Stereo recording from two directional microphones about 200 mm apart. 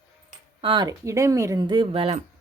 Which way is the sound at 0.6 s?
25° right (ahead or behind).